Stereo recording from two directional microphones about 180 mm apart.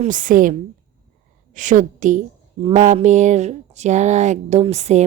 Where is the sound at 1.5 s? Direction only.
45° right (ahead or behind).